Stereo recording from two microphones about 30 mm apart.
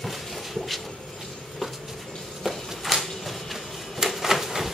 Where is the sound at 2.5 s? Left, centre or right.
Centre.